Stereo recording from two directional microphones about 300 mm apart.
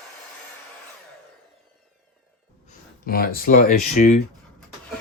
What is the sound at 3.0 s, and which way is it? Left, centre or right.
Speech, left.